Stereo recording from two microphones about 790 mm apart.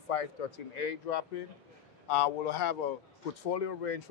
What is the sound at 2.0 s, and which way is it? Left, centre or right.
Speech, left.